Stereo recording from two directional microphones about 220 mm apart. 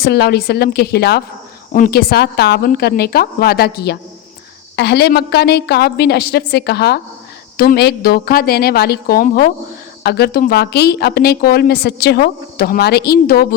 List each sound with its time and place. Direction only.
0.0 s a woman's voice: 45° left (ahead or behind)